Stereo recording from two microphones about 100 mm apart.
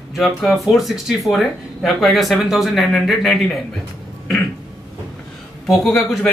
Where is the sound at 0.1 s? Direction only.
Centre (ahead or behind).